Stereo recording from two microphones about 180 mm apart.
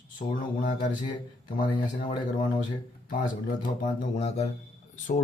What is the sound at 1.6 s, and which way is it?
Speech, 30° left (ahead or behind).